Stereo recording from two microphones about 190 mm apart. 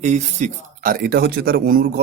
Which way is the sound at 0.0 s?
40° right (ahead or behind).